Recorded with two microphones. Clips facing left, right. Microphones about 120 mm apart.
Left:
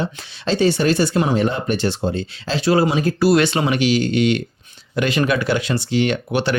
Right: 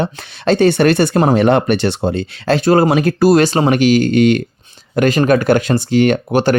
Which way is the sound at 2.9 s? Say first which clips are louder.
Right 6 dB; 70° right (ahead or behind).